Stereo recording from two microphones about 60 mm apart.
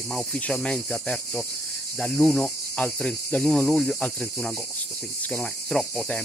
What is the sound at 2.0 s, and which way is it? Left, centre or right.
Cricket, centre.